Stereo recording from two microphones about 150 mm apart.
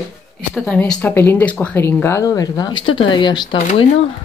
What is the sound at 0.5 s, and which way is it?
Speech, 5° left (ahead or behind).